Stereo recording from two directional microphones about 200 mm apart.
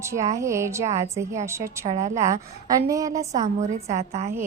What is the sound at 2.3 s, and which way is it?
A woman's voice, 15° right (ahead or behind).